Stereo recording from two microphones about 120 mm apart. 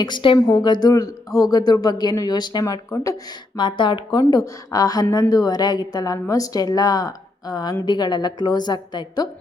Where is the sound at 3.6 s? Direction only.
40° left (ahead or behind).